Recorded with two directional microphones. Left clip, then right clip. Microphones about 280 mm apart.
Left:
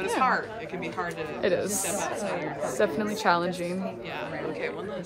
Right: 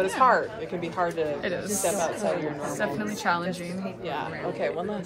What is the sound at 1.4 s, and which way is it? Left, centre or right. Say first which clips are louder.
A woman's voice: left 1 dB; left.